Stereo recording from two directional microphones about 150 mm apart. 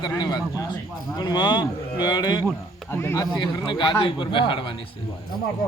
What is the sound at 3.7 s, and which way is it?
A man's voice, 30° left (ahead or behind).